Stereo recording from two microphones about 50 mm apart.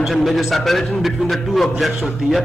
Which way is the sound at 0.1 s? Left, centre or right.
Centre.